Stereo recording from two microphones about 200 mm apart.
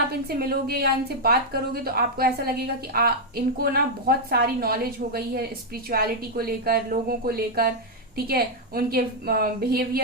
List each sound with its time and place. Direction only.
0.3 s a woman's voice: 50° right (ahead or behind)